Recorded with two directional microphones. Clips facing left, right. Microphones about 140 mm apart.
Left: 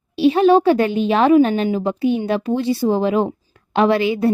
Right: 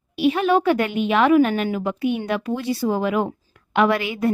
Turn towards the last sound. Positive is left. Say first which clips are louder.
# left 4 dB
turn(degrees=30)  # may be behind; listen again after turning